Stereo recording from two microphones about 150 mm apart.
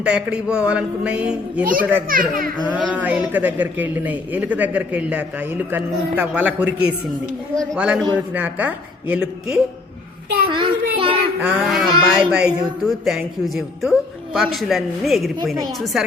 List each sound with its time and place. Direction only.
0.0 s a woman's voice: 5° right (ahead or behind)
2.0 s a child's voice: 70° right (ahead or behind)
2.9 s a woman's voice: 10° right (ahead or behind)
7.5 s a woman's voice: 5° left (ahead or behind)
10.5 s a child's voice: 35° right (ahead or behind)
11.3 s speech: 5° right (ahead or behind)